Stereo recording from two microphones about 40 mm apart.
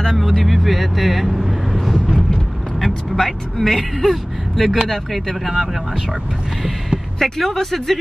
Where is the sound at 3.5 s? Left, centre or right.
Centre.